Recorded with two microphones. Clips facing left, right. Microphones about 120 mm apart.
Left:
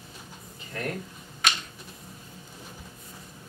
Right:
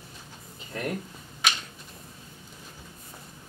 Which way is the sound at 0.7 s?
15° right (ahead or behind).